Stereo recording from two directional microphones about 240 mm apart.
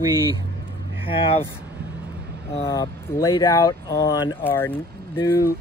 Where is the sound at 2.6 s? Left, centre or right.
Centre.